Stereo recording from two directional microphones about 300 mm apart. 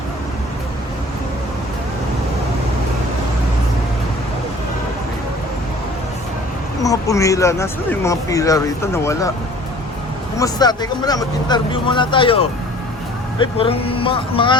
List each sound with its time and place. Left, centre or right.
6.8 s speech: centre
10.3 s speech: centre